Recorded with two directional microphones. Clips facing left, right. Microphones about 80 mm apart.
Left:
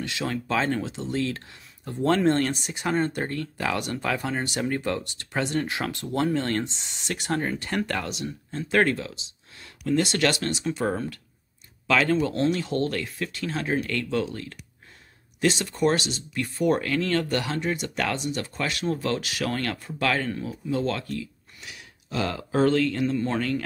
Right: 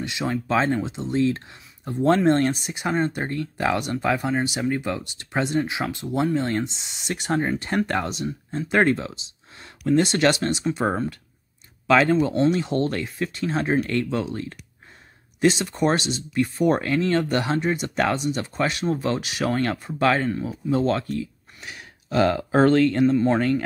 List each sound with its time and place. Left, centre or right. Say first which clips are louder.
0.0 s speech: right 3 dB; centre
7.2 s speech: right 4 dB; right
11.9 s speech: right 4 dB; right
20.2 s speech: right 4 dB; centre
20.7 s speech: right 5 dB; right
23.0 s speech: right 6 dB; right